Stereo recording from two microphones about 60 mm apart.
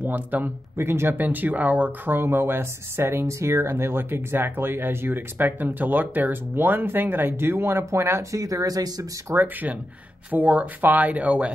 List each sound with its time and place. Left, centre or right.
0.0 s speech: right
0.7 s speech: right
9.3 s speech: right